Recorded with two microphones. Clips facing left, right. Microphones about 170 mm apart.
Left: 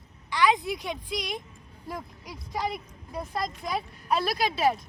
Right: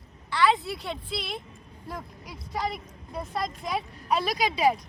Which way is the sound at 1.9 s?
Centre (ahead or behind).